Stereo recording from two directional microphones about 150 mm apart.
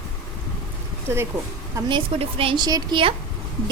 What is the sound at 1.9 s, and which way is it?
A woman's voice, 35° right (ahead or behind).